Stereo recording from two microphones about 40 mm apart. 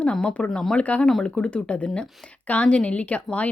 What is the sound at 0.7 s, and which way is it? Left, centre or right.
A woman's voice, left.